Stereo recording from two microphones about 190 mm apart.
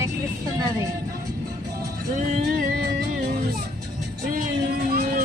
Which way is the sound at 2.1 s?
45° right (ahead or behind).